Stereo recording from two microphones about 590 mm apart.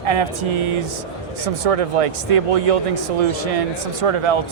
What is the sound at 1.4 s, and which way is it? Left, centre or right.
Speech, right.